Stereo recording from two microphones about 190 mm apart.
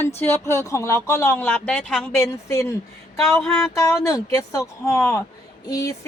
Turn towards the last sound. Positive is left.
turn(degrees=15)  # may be behind; listen again after turning